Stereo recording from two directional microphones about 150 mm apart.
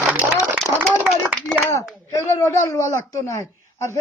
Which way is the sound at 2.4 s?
20° left (ahead or behind).